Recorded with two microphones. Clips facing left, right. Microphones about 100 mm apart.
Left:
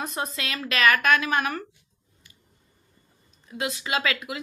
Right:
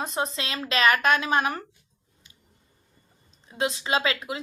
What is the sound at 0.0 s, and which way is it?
Speech, 25° right (ahead or behind).